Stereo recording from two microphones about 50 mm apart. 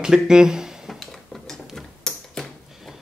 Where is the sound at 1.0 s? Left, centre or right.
Centre.